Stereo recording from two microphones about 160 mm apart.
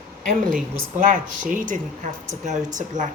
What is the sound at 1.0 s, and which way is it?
Speech, 55° right (ahead or behind).